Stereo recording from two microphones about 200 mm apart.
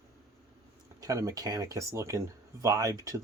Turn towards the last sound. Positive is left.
turn(degrees=-15)  # may be behind; listen again after turning